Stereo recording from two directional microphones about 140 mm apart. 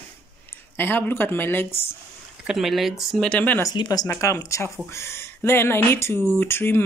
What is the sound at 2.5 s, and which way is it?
Speech, centre (ahead or behind).